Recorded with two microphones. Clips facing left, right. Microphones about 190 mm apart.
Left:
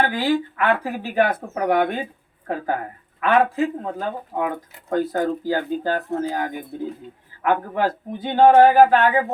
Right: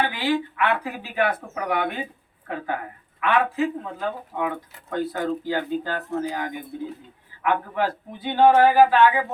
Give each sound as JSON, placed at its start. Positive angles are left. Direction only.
{"t": 0.1, "sound": "speech", "side_deg": 45}